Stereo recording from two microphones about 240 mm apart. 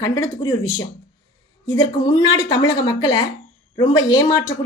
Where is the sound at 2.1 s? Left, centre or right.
Centre.